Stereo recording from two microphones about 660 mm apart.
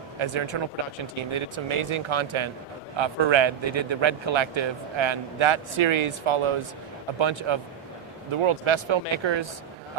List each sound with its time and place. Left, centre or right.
0.2 s speech: right